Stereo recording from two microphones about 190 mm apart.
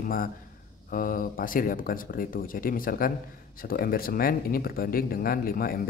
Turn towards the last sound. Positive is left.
turn(degrees=50)  # may be behind; listen again after turning